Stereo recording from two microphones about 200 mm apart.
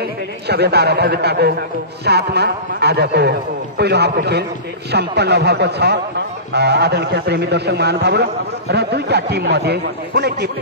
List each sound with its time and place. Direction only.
0.5 s speech: 55° right (ahead or behind)